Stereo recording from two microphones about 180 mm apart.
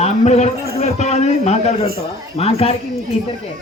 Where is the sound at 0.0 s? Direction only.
35° left (ahead or behind).